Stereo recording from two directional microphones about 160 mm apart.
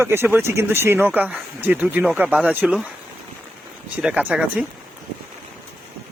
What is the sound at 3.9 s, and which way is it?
Speech, 10° right (ahead or behind).